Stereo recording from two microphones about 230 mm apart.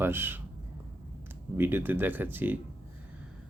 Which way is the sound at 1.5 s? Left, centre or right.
Centre.